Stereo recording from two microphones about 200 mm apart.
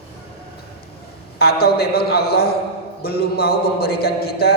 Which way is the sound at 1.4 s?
50° left (ahead or behind).